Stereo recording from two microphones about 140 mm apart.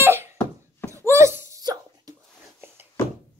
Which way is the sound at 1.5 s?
25° right (ahead or behind).